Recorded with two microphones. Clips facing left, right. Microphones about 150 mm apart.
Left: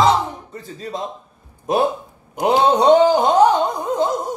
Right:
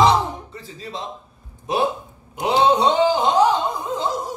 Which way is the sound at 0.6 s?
45° left (ahead or behind).